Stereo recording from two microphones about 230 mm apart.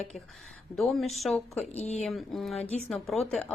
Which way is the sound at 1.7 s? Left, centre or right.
Left.